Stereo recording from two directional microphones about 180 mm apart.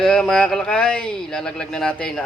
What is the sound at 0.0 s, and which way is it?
Speech, 5° left (ahead or behind).